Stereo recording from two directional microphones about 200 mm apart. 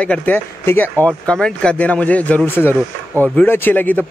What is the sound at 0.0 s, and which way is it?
A man's voice, 5° left (ahead or behind).